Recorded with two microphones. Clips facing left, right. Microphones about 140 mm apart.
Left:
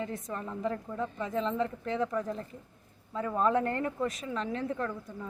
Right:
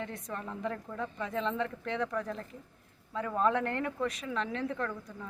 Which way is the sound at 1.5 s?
35° left (ahead or behind).